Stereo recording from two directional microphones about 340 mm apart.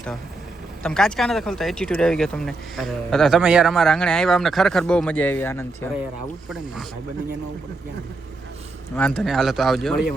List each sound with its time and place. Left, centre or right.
0.8 s speech: centre
9.0 s speech: centre